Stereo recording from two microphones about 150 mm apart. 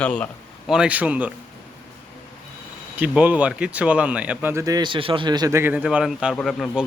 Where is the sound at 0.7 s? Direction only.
5° right (ahead or behind).